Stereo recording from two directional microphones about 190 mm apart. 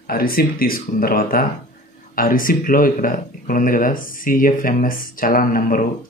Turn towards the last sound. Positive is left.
turn(degrees=50)  # may be behind; listen again after turning